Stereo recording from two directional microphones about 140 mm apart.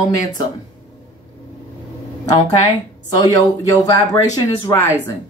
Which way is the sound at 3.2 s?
25° left (ahead or behind).